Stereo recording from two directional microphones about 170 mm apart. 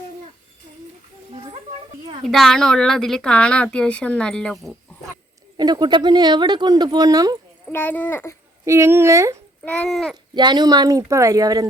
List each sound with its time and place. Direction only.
2.2 s speech: centre (ahead or behind)
5.5 s speech: 25° right (ahead or behind)
7.7 s speech: 10° left (ahead or behind)
8.6 s speech: 15° right (ahead or behind)
9.6 s speech: 5° left (ahead or behind)
10.3 s speech: 25° right (ahead or behind)